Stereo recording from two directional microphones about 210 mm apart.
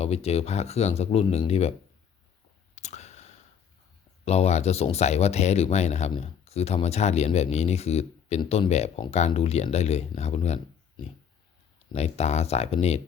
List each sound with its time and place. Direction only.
0.0 s speech: 30° left (ahead or behind)
2.7 s a sound: 35° left (ahead or behind)
4.3 s speech: 30° left (ahead or behind)